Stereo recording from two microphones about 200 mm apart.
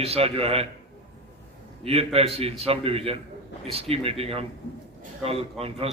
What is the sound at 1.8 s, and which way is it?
A man's voice, 30° right (ahead or behind).